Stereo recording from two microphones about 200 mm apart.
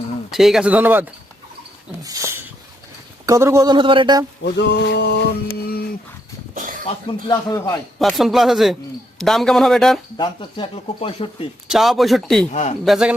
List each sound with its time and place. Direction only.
0.3 s a man's voice: centre (ahead or behind)
2.0 s a sound: 15° right (ahead or behind)
3.2 s speech: 15° right (ahead or behind)
4.4 s mantra: 60° left (ahead or behind)
6.5 s a sound: 40° right (ahead or behind)
7.1 s speech: 15° left (ahead or behind)
7.9 s a man's voice: centre (ahead or behind)
10.2 s speech: 25° left (ahead or behind)
11.7 s a man's voice: centre (ahead or behind)
12.5 s speech: 35° left (ahead or behind)
12.8 s a man's voice: centre (ahead or behind)